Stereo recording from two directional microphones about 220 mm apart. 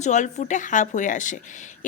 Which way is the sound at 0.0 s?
30° left (ahead or behind).